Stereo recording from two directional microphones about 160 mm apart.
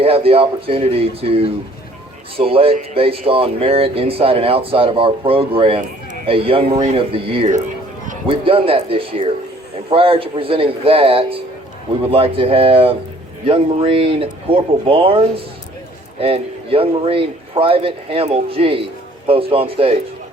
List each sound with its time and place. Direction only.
0.0 s speech: 35° right (ahead or behind)